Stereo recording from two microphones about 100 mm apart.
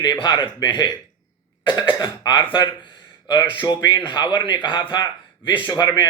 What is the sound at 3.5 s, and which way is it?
A man's voice, 50° left (ahead or behind).